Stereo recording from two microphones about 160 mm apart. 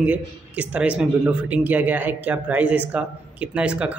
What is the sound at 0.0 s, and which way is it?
A man's voice, 10° right (ahead or behind).